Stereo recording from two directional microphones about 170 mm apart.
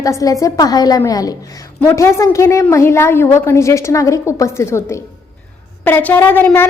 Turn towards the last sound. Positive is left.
turn(degrees=10)  # may be behind; listen again after turning